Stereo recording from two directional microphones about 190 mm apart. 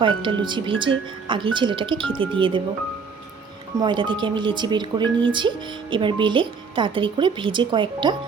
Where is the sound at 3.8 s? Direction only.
25° right (ahead or behind).